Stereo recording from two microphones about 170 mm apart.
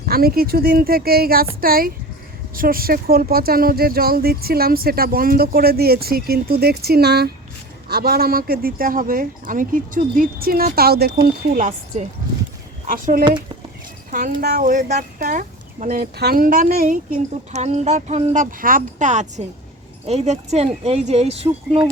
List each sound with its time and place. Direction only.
0.0 s speech: 65° right (ahead or behind)
11.5 s speech: 45° right (ahead or behind)
14.3 s speech: 60° right (ahead or behind); by 21.8 s 35° right (ahead or behind)